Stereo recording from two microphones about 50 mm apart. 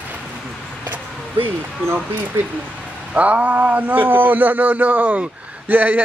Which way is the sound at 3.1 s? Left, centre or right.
Right.